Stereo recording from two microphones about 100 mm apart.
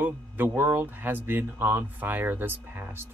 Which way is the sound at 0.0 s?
20° right (ahead or behind).